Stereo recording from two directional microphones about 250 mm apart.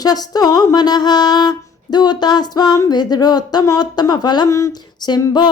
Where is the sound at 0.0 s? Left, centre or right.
Centre.